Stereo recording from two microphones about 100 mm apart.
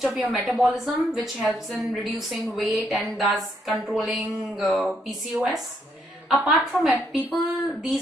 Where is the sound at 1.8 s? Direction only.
Centre (ahead or behind).